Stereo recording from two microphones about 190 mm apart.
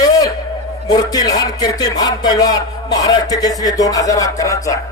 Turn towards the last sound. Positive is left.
turn(degrees=15)  # may be behind; listen again after turning